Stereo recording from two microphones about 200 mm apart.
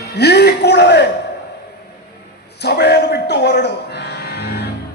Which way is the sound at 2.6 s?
55° left (ahead or behind).